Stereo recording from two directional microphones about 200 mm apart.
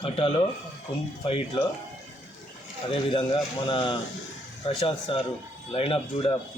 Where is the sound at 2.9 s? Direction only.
25° left (ahead or behind).